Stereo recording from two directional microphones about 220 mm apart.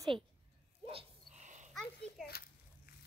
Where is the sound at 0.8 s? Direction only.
30° right (ahead or behind).